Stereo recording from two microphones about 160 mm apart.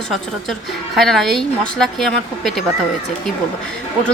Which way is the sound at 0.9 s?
Centre (ahead or behind).